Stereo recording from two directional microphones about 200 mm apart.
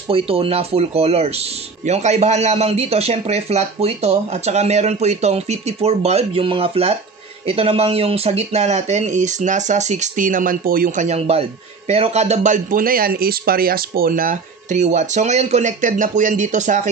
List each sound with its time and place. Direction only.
0.1 s a man's voice: 30° right (ahead or behind); by 11.1 s 45° right (ahead or behind)
11.1 s a man's voice: 30° right (ahead or behind)